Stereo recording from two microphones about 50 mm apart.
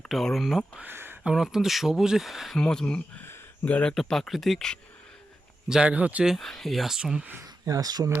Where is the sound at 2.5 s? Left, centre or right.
Centre.